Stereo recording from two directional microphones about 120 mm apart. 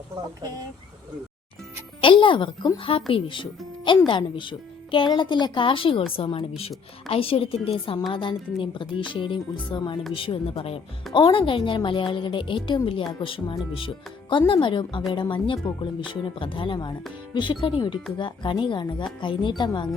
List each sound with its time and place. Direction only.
2.0 s speech: 45° left (ahead or behind)